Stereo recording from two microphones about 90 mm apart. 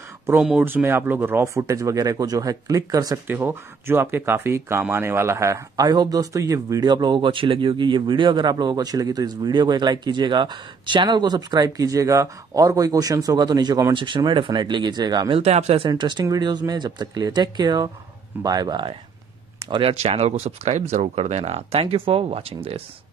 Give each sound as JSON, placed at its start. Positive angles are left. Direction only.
{"t": 0.4, "sound": "speech", "side_deg": -10}
{"t": 0.7, "sound": "speech", "side_deg": -25}
{"t": 3.3, "sound": "speech", "side_deg": -25}
{"t": 5.8, "sound": "speech", "side_deg": -50}
{"t": 13.9, "sound": "speech", "side_deg": -60}
{"t": 15.3, "sound": "speech", "side_deg": -90}
{"t": 16.0, "sound": "speech", "side_deg": -60}
{"t": 19.8, "sound": "speech", "side_deg": -90}
{"t": 21.7, "sound": "speech", "side_deg": -90}